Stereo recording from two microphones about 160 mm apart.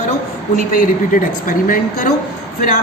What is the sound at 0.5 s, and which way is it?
A woman's voice, 55° left (ahead or behind).